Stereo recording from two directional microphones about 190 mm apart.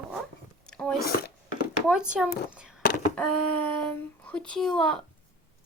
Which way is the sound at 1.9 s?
5° right (ahead or behind).